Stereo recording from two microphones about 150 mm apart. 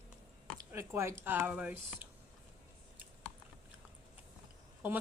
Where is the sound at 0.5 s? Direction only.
15° right (ahead or behind).